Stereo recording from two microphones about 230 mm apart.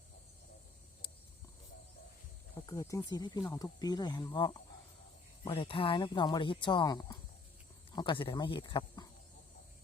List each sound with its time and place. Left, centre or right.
2.6 s speech: centre